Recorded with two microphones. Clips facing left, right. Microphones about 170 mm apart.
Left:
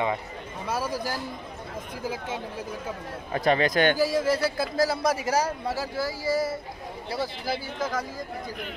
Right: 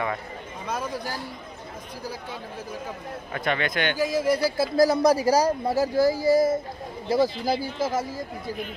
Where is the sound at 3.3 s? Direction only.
35° left (ahead or behind).